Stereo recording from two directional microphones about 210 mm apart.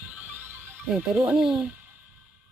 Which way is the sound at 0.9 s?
5° right (ahead or behind).